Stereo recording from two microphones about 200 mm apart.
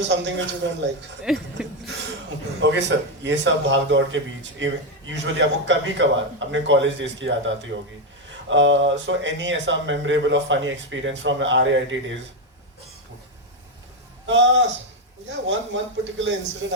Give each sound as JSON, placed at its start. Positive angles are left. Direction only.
{"t": 0.0, "sound": "a man's voice", "side_deg": -60}
{"t": 1.2, "sound": "speech", "side_deg": 0}
{"t": 2.6, "sound": "a man's voice", "side_deg": -60}
{"t": 14.3, "sound": "a man's voice", "side_deg": -65}